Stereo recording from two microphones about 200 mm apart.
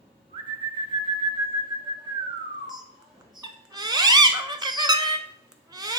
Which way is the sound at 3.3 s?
20° right (ahead or behind).